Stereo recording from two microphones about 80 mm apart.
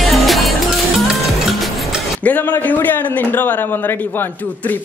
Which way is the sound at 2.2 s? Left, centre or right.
Left.